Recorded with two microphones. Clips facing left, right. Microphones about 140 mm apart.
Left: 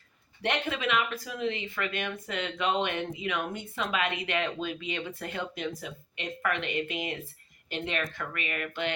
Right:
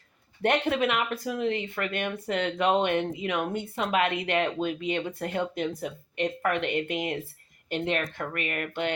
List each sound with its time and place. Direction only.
0.7 s speech: 55° right (ahead or behind)